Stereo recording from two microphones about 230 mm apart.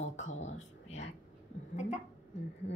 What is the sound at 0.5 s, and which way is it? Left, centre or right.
Speech, left.